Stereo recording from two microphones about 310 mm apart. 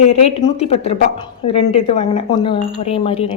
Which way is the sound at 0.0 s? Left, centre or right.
Centre.